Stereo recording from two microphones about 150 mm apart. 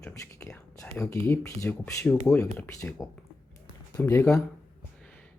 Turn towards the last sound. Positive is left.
turn(degrees=15)  # may be behind; listen again after turning